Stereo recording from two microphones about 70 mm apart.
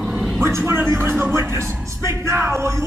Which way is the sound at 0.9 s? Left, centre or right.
Right.